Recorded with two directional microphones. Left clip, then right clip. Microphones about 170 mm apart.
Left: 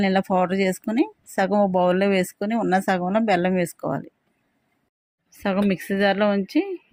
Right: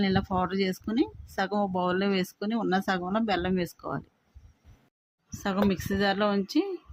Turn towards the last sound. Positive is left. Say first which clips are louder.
# left 5 dB
turn(degrees=25)  # may be behind; listen again after turning